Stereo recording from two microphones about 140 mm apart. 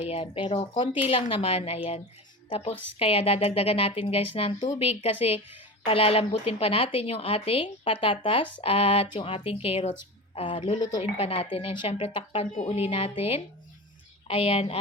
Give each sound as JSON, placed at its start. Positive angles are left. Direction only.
{"t": 0.1, "sound": "a woman's voice", "side_deg": 40}